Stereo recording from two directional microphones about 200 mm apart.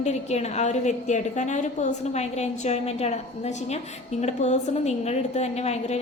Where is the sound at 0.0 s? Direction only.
35° left (ahead or behind).